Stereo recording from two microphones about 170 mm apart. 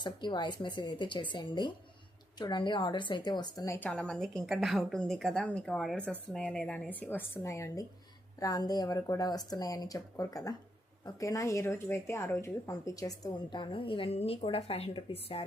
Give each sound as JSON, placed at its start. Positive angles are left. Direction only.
{"t": 0.0, "sound": "speech", "side_deg": 25}
{"t": 3.8, "sound": "a woman's voice", "side_deg": 5}